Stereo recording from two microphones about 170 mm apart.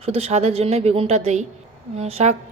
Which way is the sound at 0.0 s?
40° right (ahead or behind).